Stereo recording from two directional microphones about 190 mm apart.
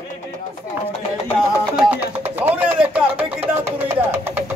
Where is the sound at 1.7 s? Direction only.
10° right (ahead or behind).